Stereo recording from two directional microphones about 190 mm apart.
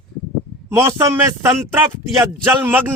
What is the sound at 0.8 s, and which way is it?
Speech, 15° right (ahead or behind).